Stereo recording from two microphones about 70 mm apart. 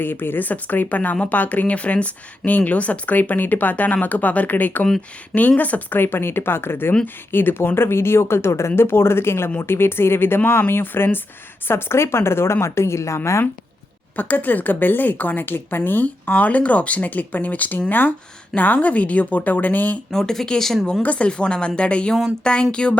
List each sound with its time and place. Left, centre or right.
0.0 s speech: left
14.2 s speech: left
20.1 s speech: centre
21.0 s speech: centre